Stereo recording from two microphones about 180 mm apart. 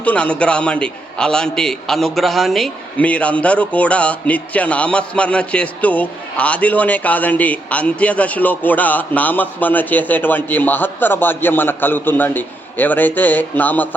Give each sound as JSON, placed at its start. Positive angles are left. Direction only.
{"t": 0.0, "sound": "a man's voice", "side_deg": 5}